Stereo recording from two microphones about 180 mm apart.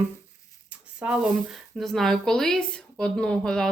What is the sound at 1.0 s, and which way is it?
Speech, 10° right (ahead or behind).